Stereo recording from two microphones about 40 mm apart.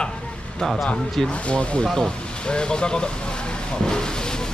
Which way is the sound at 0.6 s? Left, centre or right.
Centre.